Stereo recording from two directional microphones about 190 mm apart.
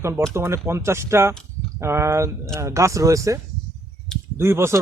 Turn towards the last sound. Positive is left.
turn(degrees=-15)  # may be behind; listen again after turning